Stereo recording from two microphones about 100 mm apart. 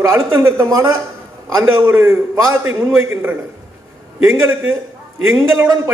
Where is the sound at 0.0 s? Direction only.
30° right (ahead or behind).